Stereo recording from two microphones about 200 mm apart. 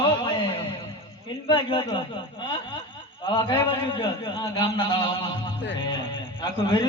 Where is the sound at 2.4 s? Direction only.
20° left (ahead or behind).